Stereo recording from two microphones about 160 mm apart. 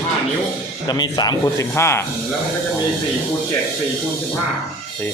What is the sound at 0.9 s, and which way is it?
Speech, 25° left (ahead or behind).